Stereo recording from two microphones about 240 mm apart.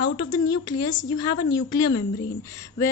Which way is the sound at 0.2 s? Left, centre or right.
Centre.